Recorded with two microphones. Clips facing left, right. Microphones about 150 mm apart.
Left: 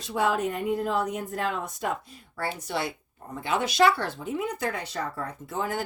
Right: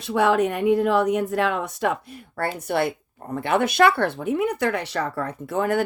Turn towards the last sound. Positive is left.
turn(degrees=-60)  # may be behind; listen again after turning